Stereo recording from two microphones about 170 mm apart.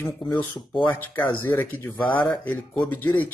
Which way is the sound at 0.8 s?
10° left (ahead or behind).